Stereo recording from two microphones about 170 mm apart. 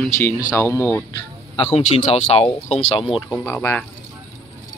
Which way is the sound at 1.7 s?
35° left (ahead or behind).